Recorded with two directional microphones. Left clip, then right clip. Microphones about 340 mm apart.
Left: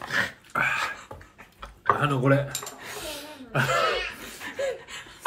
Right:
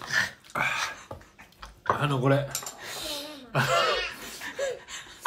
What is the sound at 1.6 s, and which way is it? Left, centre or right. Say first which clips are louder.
Dishes: left 4 dB; centre.